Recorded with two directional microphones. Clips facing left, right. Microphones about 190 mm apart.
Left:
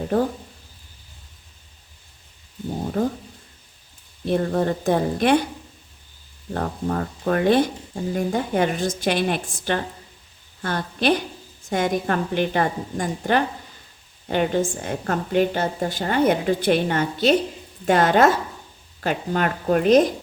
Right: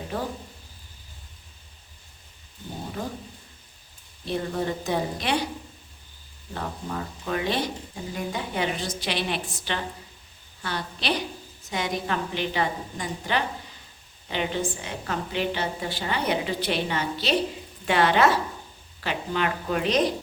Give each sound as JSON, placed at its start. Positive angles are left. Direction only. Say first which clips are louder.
{"t": 4.3, "sound": "a woman's voice", "louder": "left 7 dB", "side_deg": 50}
{"t": 6.5, "sound": "a woman's voice", "louder": "left 8 dB", "side_deg": 50}